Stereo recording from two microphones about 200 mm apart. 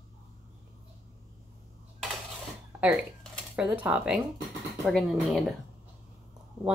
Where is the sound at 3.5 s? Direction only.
5° right (ahead or behind).